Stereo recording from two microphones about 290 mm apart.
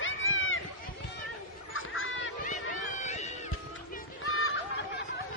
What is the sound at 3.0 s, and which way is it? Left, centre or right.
Cat, left.